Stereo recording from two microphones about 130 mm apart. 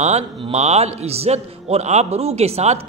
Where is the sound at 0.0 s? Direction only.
60° right (ahead or behind).